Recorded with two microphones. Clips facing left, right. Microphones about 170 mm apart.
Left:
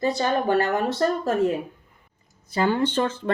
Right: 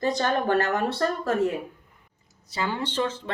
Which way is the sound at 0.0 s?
10° left (ahead or behind).